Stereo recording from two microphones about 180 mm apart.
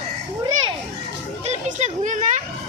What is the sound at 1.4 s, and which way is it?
Speech, 40° right (ahead or behind).